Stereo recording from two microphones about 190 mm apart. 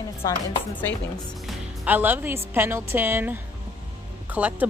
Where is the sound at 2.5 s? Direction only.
10° right (ahead or behind).